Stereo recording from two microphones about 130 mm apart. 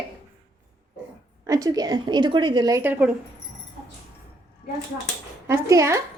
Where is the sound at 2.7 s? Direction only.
15° right (ahead or behind).